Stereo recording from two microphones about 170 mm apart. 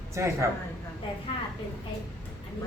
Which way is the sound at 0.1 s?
15° right (ahead or behind).